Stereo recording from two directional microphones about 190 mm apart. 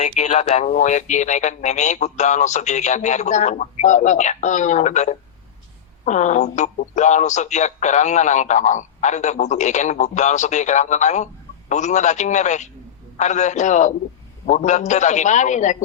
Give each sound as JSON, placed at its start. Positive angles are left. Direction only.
{"t": 0.0, "sound": "speech", "side_deg": 40}